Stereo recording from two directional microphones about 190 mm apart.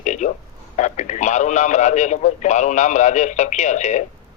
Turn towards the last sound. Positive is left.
turn(degrees=40)  # may be behind; listen again after turning